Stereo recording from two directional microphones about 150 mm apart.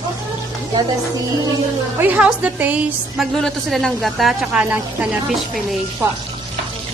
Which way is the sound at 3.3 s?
5° left (ahead or behind).